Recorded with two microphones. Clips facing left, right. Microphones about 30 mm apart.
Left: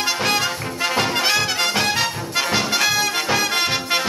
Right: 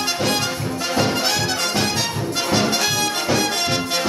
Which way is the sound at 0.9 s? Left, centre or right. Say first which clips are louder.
Left 1 dB; centre.